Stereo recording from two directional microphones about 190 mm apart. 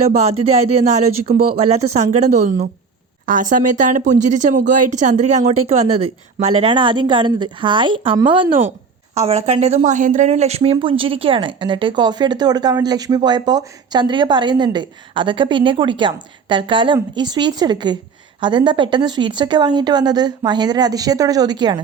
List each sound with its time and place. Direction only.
0.1 s speech: 35° right (ahead or behind)